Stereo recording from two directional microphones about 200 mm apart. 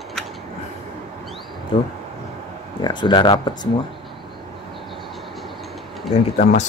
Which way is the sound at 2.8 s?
20° left (ahead or behind).